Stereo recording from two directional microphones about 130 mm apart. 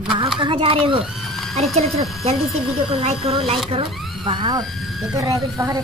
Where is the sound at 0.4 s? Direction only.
45° right (ahead or behind).